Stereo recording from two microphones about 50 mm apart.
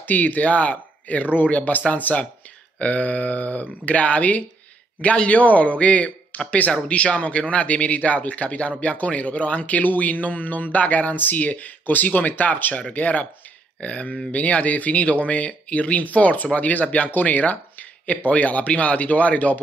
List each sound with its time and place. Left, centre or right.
0.0 s a man's voice: left